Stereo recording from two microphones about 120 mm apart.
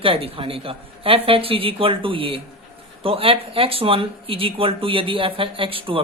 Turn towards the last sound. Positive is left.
turn(degrees=-50)  # may be behind; listen again after turning